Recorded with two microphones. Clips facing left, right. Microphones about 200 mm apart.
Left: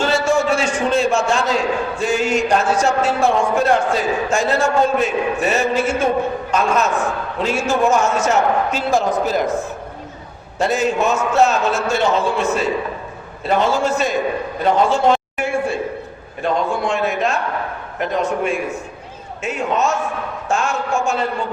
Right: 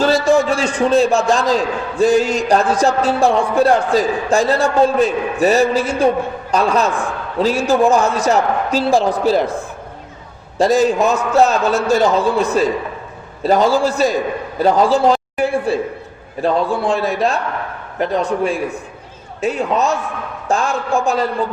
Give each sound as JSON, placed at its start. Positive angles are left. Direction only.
{"t": 0.0, "sound": "a man's voice", "side_deg": -35}
{"t": 10.6, "sound": "a man's voice", "side_deg": -35}